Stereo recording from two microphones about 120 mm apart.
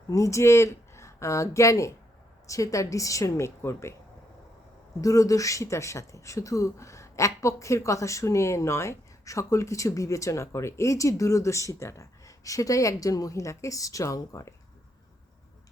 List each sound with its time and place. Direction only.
0.1 s speech: 25° left (ahead or behind)
4.9 s speech: 30° left (ahead or behind)